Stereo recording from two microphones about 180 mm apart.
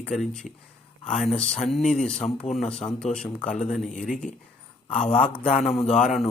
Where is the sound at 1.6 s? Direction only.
Centre (ahead or behind).